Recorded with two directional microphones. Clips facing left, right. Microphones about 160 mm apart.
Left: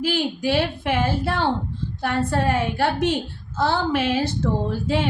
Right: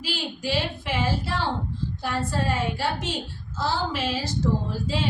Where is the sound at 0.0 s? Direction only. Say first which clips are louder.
Left 8 dB; 55° left (ahead or behind).